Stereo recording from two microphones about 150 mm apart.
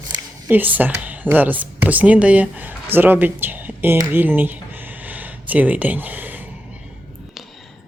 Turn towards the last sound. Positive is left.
turn(degrees=-10)  # may be behind; listen again after turning